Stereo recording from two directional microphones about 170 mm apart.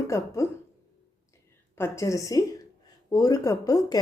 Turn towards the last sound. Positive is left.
turn(degrees=20)  # may be behind; listen again after turning